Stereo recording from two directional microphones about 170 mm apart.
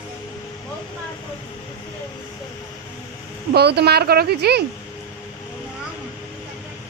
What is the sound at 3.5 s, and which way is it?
Speech, 70° right (ahead or behind).